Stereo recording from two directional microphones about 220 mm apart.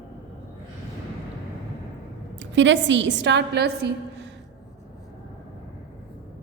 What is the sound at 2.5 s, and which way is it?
A woman's voice, 55° right (ahead or behind).